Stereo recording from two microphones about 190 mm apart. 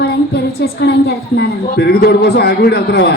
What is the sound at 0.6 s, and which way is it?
A woman's voice, 60° left (ahead or behind).